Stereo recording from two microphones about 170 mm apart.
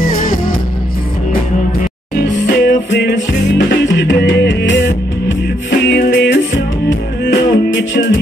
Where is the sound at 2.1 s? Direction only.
75° left (ahead or behind); by 4.8 s 90° left.